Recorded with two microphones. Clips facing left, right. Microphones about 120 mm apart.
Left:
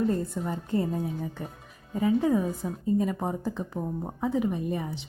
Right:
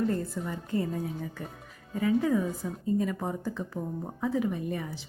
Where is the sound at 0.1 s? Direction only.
30° left (ahead or behind).